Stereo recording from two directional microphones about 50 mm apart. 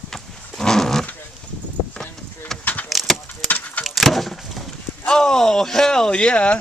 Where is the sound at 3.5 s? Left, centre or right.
Left.